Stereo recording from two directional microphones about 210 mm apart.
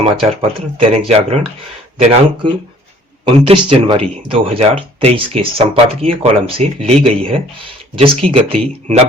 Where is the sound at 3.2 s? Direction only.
25° right (ahead or behind).